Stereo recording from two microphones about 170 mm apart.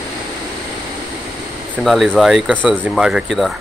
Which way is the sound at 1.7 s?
Centre (ahead or behind).